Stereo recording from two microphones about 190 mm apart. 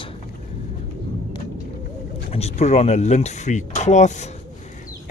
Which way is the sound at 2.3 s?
35° left (ahead or behind).